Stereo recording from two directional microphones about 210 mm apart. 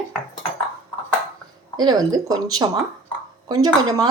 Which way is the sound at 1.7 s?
20° right (ahead or behind).